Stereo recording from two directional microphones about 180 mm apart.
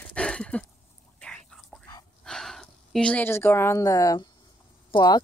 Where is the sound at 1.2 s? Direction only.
10° left (ahead or behind).